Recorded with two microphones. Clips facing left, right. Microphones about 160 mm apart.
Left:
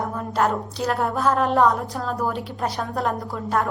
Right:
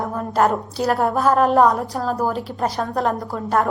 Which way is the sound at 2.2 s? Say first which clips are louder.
Right 2 dB; 35° right (ahead or behind).